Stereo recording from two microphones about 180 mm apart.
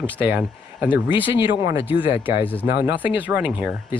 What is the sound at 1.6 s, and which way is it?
Speech, 15° right (ahead or behind).